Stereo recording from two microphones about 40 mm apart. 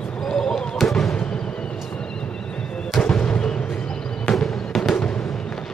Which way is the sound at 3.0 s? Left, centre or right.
Left.